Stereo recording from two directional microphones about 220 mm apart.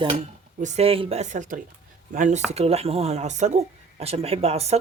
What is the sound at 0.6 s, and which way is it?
Speech, 25° right (ahead or behind).